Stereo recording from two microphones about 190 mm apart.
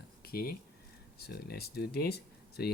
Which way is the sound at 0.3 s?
50° left (ahead or behind).